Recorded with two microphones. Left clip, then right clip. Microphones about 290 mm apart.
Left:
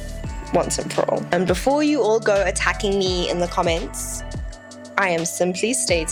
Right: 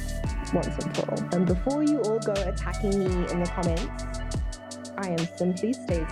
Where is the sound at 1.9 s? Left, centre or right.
Left.